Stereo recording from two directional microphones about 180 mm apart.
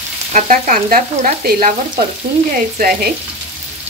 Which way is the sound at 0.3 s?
45° right (ahead or behind).